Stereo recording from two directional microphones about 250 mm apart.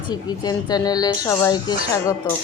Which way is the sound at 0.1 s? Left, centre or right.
Centre.